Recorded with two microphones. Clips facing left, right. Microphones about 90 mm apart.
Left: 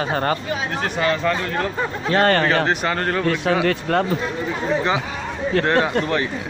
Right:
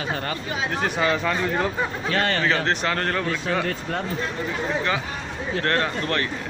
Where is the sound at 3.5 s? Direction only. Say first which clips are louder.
Left 6 dB; 80° left.